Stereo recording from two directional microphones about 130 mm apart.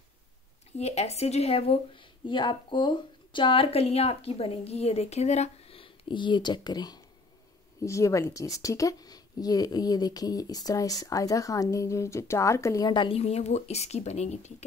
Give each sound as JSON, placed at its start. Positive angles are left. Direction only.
{"t": 0.7, "sound": "speech", "side_deg": 55}
{"t": 13.2, "sound": "speech", "side_deg": 55}